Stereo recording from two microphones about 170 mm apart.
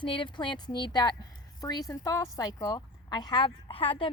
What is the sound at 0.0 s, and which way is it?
A woman's voice, 30° left (ahead or behind).